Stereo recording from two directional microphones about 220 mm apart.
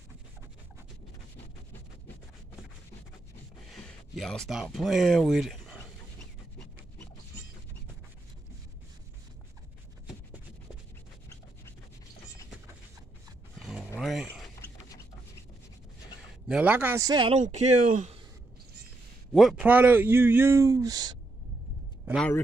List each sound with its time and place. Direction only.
4.1 s speech: centre (ahead or behind)
13.6 s a sound: centre (ahead or behind)
16.4 s a man's voice: 5° right (ahead or behind)
17.4 s speech: 35° right (ahead or behind)
19.3 s a man's voice: centre (ahead or behind)
22.0 s a sound: centre (ahead or behind)